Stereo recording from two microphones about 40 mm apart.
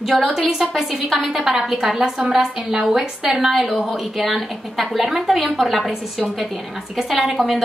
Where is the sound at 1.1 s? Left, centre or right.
Centre.